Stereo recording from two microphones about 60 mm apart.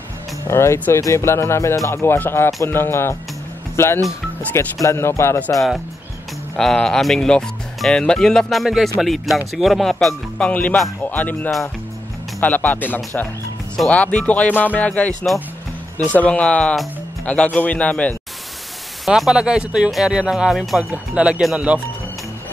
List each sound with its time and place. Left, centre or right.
0.5 s speech: left
2.1 s speech: left
6.5 s speech: centre
10.5 s speech: left
19.0 s speech: centre
20.9 s speech: right